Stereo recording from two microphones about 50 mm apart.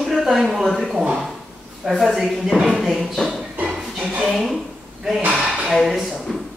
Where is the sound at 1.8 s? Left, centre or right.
Centre.